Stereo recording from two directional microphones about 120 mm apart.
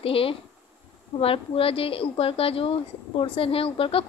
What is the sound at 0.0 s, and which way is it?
Speech, 50° left (ahead or behind).